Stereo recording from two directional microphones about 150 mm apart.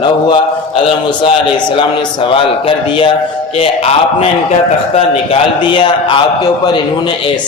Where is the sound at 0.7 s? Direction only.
40° left (ahead or behind).